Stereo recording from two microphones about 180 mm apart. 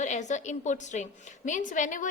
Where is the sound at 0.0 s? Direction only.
40° left (ahead or behind).